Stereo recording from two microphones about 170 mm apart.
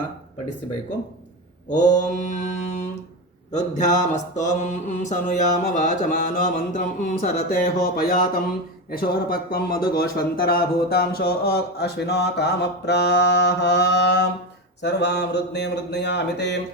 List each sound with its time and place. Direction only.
1.7 s mantra: 45° left (ahead or behind)
7.0 s speech: 50° left (ahead or behind); by 14.3 s 90° left
14.8 s a sound: 90° left